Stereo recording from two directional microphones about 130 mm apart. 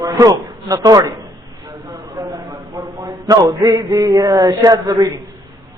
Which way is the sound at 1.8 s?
25° right (ahead or behind).